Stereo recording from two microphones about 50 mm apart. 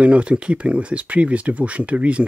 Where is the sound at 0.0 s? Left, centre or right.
Right.